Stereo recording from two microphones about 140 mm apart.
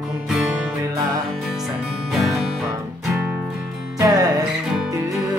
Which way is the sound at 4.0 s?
25° right (ahead or behind).